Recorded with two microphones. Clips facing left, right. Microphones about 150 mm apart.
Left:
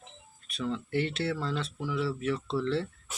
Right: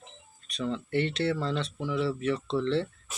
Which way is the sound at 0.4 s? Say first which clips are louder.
Right 2 dB; 5° left (ahead or behind).